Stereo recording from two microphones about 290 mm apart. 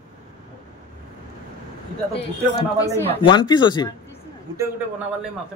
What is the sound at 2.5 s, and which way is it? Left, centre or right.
Speech, centre.